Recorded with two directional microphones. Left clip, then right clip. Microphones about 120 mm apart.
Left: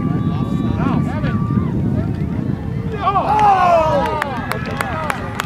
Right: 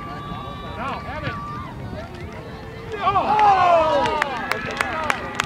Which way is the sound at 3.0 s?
5° left (ahead or behind).